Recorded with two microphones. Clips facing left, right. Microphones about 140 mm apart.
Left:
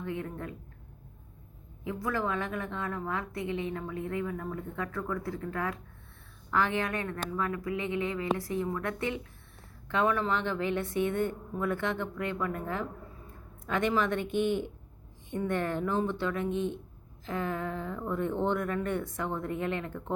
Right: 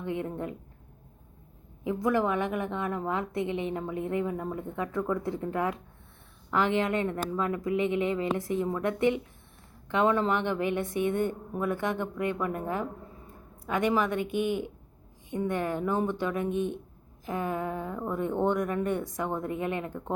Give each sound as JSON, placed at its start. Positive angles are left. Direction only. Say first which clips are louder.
{"t": 0.0, "sound": "a woman's voice", "louder": "right 4 dB", "side_deg": -20}
{"t": 1.8, "sound": "a woman's voice", "louder": "right 6 dB", "side_deg": -20}